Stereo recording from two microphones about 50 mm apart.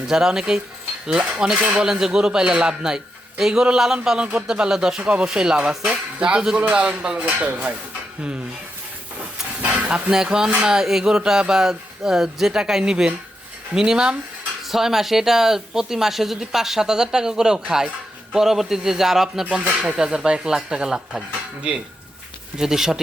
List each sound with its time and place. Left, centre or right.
0.1 s speech: centre
1.5 s speech: right
1.8 s speech: centre
7.3 s speech: right
9.6 s a sound: right
10.2 s speech: centre
19.5 s speech: right
20.0 s speech: centre
22.5 s speech: centre